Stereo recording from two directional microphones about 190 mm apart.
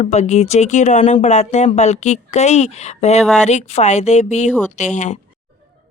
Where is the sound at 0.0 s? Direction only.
35° left (ahead or behind).